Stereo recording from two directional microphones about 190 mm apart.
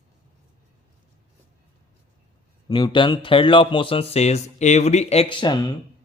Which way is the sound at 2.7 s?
25° left (ahead or behind).